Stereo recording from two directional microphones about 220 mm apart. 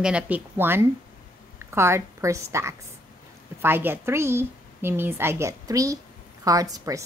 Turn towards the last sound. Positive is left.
turn(degrees=-15)  # may be behind; listen again after turning